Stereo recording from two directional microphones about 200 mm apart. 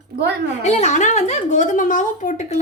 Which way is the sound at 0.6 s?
35° left (ahead or behind).